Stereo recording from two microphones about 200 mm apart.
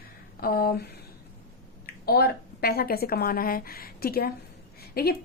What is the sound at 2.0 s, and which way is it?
A woman's voice, 50° left (ahead or behind).